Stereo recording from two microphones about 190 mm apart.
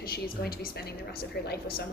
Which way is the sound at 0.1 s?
55° left (ahead or behind).